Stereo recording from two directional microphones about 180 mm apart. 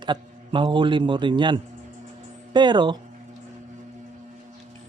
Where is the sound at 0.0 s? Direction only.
25° right (ahead or behind).